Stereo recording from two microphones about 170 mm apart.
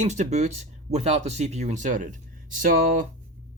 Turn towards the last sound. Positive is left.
turn(degrees=-50)  # may be behind; listen again after turning